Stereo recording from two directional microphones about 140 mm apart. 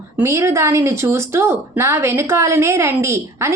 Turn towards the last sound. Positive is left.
turn(degrees=-20)  # may be behind; listen again after turning